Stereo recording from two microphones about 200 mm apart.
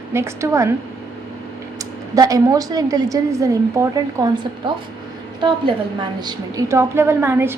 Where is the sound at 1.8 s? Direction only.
15° right (ahead or behind).